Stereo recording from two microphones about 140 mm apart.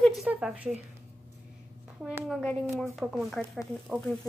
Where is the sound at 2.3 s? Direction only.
5° left (ahead or behind).